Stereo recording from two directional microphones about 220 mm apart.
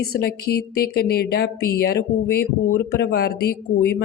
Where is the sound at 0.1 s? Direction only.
45° left (ahead or behind).